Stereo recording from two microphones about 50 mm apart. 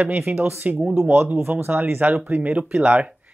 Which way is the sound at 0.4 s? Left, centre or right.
Right.